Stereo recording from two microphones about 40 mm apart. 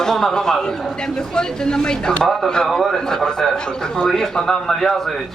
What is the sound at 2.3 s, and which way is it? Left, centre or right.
Speech, centre.